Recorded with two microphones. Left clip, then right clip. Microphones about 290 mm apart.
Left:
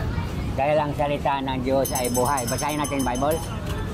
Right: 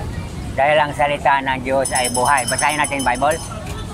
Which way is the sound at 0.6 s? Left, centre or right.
Right.